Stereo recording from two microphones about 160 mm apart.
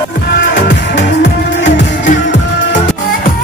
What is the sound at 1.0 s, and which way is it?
Music, 90° left.